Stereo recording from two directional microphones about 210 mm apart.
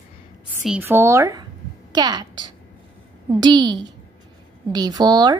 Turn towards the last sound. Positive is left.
turn(degrees=-20)  # may be behind; listen again after turning